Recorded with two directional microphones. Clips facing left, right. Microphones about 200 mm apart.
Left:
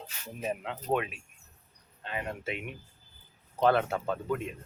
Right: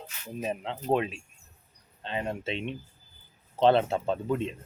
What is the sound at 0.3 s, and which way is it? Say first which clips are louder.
Speech: right 2 dB; 25° right (ahead or behind).